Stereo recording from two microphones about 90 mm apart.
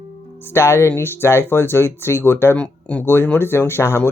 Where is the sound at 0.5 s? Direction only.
30° left (ahead or behind).